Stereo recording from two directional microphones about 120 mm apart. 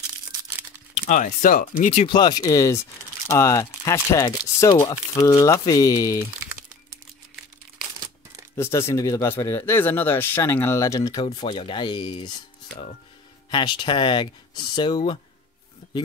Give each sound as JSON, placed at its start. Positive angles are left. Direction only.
{"t": 0.9, "sound": "speech", "side_deg": 90}
{"t": 2.0, "sound": "speech", "side_deg": 35}
{"t": 8.5, "sound": "speech", "side_deg": 20}
{"t": 11.3, "sound": "speech", "side_deg": 45}
{"t": 13.5, "sound": "speech", "side_deg": 40}